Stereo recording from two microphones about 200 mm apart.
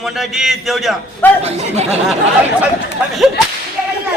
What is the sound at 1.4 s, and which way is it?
Speech, 30° right (ahead or behind).